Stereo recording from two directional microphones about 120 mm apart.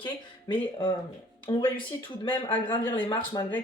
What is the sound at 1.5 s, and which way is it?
Speech, 30° left (ahead or behind).